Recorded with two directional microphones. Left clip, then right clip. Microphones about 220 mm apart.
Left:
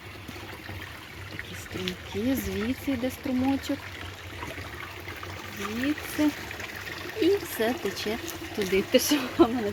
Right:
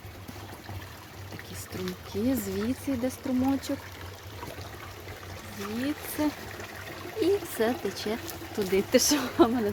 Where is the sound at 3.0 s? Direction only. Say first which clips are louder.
Even; 5° right (ahead or behind).